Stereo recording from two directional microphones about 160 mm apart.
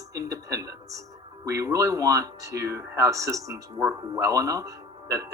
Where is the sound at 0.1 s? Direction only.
20° right (ahead or behind).